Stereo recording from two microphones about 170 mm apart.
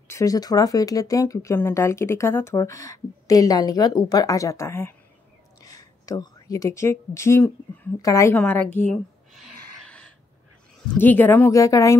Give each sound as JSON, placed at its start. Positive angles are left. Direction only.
{"t": 0.1, "sound": "speech", "side_deg": 20}
{"t": 8.4, "sound": "a sound", "side_deg": 10}
{"t": 10.9, "sound": "speech", "side_deg": 10}